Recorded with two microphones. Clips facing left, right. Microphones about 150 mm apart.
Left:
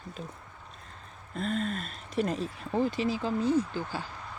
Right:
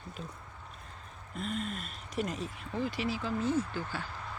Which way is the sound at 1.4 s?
35° left (ahead or behind).